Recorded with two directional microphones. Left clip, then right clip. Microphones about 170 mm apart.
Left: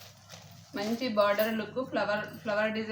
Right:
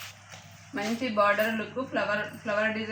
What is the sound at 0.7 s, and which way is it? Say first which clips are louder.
Speech: right 2 dB; 15° left (ahead or behind).